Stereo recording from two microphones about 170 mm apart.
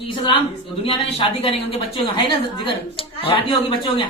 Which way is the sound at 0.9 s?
30° left (ahead or behind).